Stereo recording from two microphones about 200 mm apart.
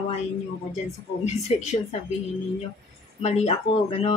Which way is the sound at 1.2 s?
35° left (ahead or behind).